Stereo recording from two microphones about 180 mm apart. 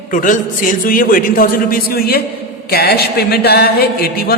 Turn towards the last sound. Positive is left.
turn(degrees=60)  # may be behind; listen again after turning